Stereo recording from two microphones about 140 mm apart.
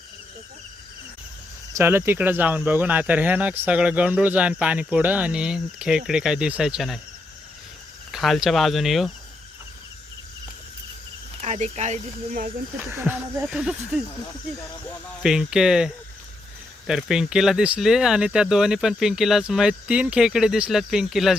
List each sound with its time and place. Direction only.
1.7 s speech: 15° right (ahead or behind)
8.1 s speech: centre (ahead or behind)
11.3 s speech: 55° right (ahead or behind)
12.8 s speech: 15° right (ahead or behind)
15.2 s speech: 5° right (ahead or behind)